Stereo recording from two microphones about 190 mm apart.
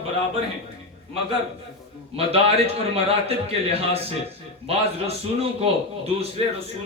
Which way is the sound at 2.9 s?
30° right (ahead or behind).